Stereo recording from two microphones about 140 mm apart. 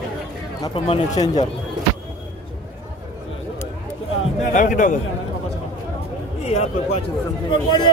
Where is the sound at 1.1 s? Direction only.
30° left (ahead or behind).